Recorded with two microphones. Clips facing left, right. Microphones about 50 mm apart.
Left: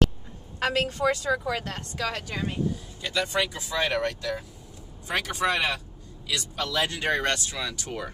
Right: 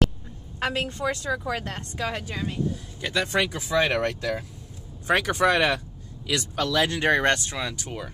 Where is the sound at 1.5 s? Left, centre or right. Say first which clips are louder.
Even; centre.